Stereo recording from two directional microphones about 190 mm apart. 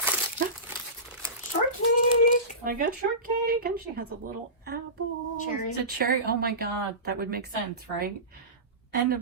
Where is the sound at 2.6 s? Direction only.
50° right (ahead or behind).